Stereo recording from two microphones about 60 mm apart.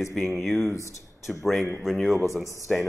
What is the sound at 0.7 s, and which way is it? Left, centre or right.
Speech, left.